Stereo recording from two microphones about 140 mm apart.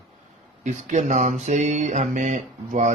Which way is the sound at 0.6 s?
60° right (ahead or behind).